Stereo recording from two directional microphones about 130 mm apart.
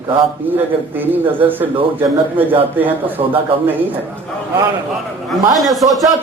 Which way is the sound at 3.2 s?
45° right (ahead or behind).